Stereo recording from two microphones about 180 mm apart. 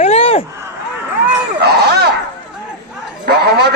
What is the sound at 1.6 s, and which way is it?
Speech, 65° right (ahead or behind).